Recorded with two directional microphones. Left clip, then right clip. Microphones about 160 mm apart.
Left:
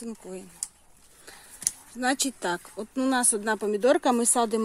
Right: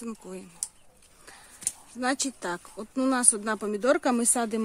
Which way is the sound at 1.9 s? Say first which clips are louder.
Left 2 dB; centre (ahead or behind).